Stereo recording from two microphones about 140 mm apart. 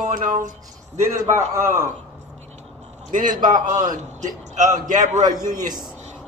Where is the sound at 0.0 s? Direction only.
70° right (ahead or behind).